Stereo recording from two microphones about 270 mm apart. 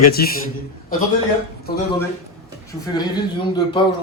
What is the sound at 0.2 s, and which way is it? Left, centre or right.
Speech, left.